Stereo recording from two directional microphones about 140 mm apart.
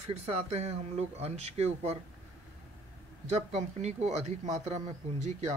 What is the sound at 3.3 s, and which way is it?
Speech, 55° right (ahead or behind).